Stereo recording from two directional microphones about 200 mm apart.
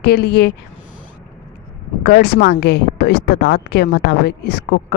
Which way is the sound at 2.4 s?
55° left (ahead or behind).